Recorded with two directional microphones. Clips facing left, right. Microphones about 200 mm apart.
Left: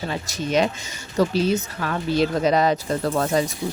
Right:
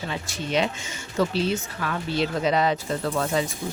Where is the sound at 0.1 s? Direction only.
40° left (ahead or behind).